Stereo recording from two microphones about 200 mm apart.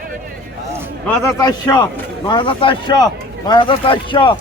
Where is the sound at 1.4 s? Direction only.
20° left (ahead or behind).